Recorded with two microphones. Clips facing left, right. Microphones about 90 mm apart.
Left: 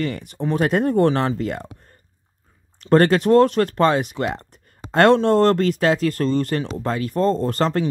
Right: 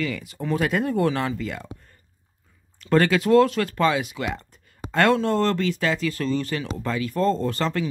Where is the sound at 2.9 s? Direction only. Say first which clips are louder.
Left 4 dB; 45° left (ahead or behind).